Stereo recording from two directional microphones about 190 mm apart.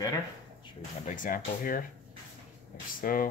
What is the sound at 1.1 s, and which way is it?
Speech, 45° left (ahead or behind).